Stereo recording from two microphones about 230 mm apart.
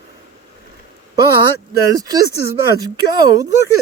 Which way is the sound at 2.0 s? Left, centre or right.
Centre.